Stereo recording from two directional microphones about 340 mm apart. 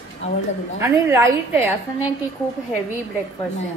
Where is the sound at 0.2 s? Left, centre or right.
Centre.